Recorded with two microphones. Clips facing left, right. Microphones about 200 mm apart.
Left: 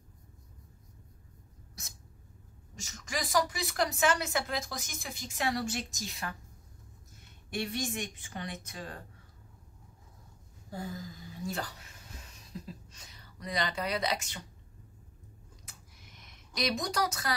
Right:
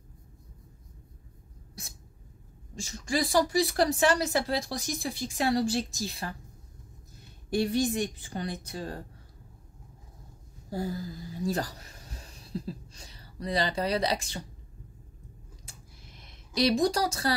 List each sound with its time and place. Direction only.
2.7 s speech: 30° right (ahead or behind)
7.4 s speech: 35° right (ahead or behind)
10.7 s speech: 35° right (ahead or behind)
15.6 s a sound: 30° right (ahead or behind)